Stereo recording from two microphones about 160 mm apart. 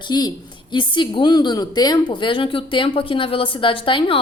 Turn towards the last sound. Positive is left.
turn(degrees=35)  # may be behind; listen again after turning